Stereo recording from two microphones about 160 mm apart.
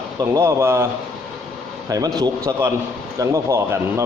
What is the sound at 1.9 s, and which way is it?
A man's voice, 25° right (ahead or behind).